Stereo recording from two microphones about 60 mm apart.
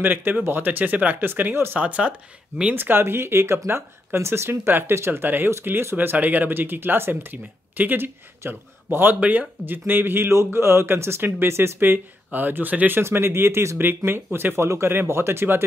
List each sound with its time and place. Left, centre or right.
0.0 s speech: right
1.8 s speech: right
2.7 s speech: right
6.1 s speech: right
9.2 s speech: right
13.0 s speech: right